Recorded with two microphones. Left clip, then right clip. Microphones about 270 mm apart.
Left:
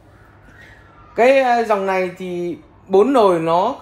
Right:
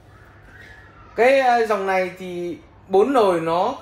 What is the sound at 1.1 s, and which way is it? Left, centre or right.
Speech, left.